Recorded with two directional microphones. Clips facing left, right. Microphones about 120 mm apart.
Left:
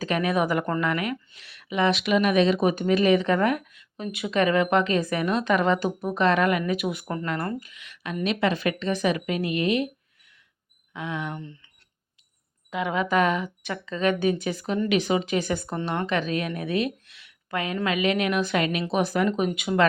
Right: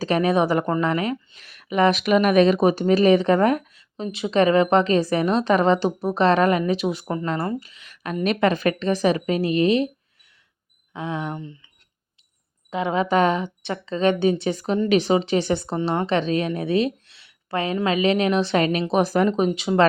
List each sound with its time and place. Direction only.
0.0 s a woman's voice: 35° right (ahead or behind)
1.4 s speech: 45° right (ahead or behind); by 7.3 s 20° right (ahead or behind)
7.6 s speech: 35° right (ahead or behind)
10.9 s speech: 30° right (ahead or behind)
11.3 s speech: 15° right (ahead or behind)
12.7 s a woman's voice: 30° right (ahead or behind)
16.6 s a sound: 30° right (ahead or behind)
17.8 s speech: 30° right (ahead or behind)
19.3 s a woman's voice: 25° right (ahead or behind)